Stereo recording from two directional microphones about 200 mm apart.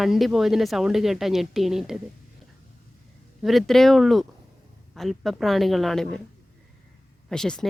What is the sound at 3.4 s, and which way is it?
Speech, centre (ahead or behind).